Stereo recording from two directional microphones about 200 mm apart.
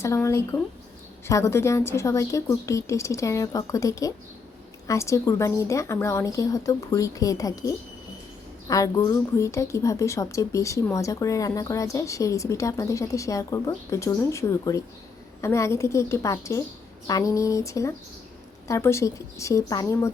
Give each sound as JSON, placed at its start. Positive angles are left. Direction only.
{"t": 0.0, "sound": "speech", "side_deg": 15}